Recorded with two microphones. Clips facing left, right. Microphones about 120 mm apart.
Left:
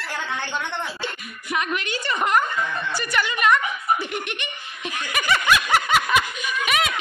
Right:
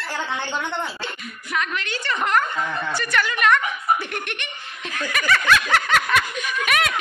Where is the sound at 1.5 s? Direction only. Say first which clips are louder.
Left 1 dB; 15° left (ahead or behind).